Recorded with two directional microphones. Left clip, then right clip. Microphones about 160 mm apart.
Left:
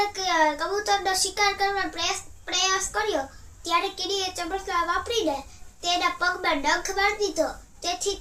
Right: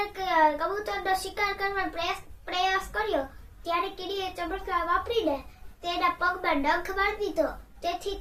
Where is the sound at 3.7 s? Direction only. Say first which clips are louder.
Left 4 dB; 10° left (ahead or behind).